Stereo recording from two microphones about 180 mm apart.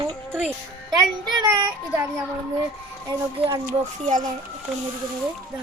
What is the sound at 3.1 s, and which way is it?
Child singing, 20° right (ahead or behind).